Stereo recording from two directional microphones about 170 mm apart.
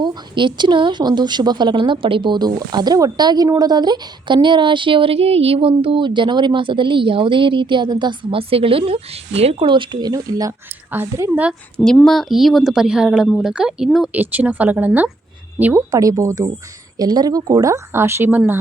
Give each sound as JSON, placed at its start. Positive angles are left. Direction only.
{"t": 0.0, "sound": "a woman's voice", "side_deg": -25}
{"t": 11.9, "sound": "a woman's voice", "side_deg": 0}